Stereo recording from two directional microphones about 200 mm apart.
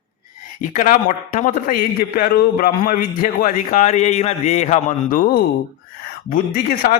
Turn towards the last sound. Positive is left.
turn(degrees=45)  # may be behind; listen again after turning